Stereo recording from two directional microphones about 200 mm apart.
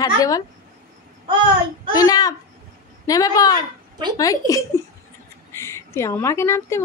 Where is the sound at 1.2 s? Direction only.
25° right (ahead or behind).